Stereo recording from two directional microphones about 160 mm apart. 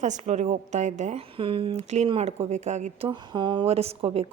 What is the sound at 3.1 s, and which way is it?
A woman's voice, 30° right (ahead or behind).